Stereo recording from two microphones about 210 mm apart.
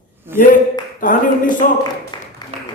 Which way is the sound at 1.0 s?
40° left (ahead or behind).